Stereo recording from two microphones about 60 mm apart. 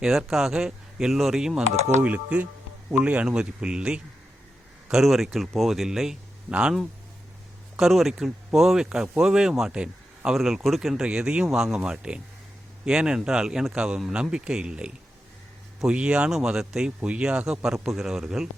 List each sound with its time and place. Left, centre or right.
0.0 s speech: centre
2.0 s speech: right
4.9 s speech: centre
6.5 s speech: centre
7.8 s speech: centre
10.9 s speech: centre
16.3 s speech: centre